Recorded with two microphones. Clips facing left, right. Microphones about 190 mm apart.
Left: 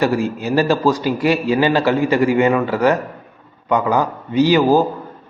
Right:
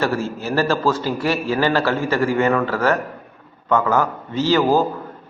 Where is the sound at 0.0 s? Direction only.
15° left (ahead or behind).